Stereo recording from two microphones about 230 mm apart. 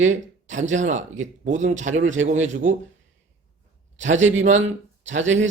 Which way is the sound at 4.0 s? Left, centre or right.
Right.